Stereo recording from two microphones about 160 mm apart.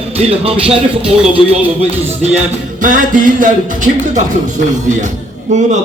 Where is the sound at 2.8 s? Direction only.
55° right (ahead or behind).